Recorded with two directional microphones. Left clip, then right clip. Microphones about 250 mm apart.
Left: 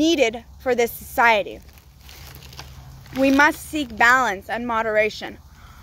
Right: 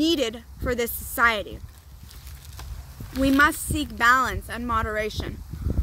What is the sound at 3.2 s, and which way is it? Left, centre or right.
A woman's voice, centre.